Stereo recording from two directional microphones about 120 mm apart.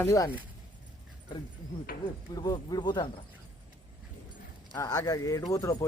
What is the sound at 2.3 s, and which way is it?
Speech, 35° left (ahead or behind).